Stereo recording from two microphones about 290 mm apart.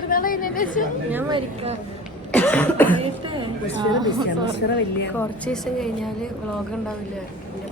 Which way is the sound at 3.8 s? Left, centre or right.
Centre.